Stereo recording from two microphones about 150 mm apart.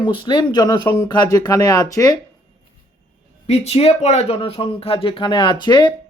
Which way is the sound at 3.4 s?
45° left (ahead or behind).